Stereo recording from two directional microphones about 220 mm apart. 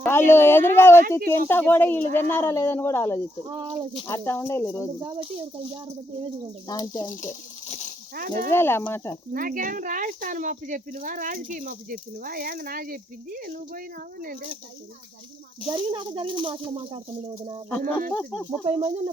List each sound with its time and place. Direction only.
0.0 s speech: 10° left (ahead or behind)
3.4 s speech: 20° right (ahead or behind)
4.0 s speech: 10° left (ahead or behind)
4.9 s speech: 20° right (ahead or behind)
6.7 s speech: 15° left (ahead or behind)
8.1 s speech: 40° right (ahead or behind)
8.4 s speech: 10° left (ahead or behind)
9.3 s speech: 40° right (ahead or behind)
15.6 s speech: 20° right (ahead or behind)
18.1 s speech: 5° left (ahead or behind)
18.6 s speech: 20° right (ahead or behind)